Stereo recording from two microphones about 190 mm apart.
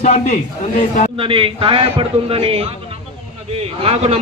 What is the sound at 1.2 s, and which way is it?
A man's voice, 30° right (ahead or behind).